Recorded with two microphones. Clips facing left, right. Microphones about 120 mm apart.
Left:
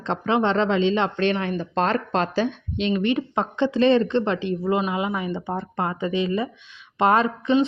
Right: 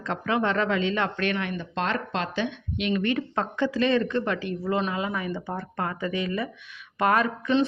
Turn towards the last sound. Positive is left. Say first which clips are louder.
# left 4 dB
turn(degrees=25)  # may be behind; listen again after turning